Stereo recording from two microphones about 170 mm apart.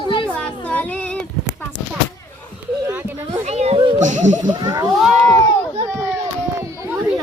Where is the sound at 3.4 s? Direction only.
40° right (ahead or behind).